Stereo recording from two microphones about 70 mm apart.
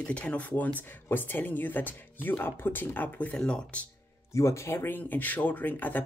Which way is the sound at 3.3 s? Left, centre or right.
Centre.